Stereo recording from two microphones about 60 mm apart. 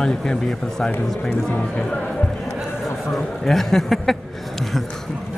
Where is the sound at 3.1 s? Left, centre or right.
Centre.